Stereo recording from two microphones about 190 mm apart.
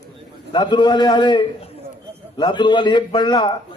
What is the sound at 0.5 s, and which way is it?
A man's voice, 25° left (ahead or behind).